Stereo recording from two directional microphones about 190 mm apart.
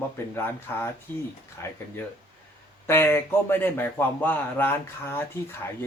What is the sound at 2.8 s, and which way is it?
Speech, 15° left (ahead or behind).